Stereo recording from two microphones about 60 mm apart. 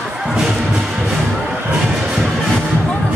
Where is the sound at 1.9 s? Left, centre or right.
Centre.